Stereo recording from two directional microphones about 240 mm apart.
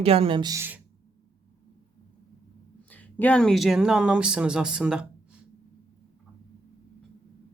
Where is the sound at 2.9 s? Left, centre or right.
Centre.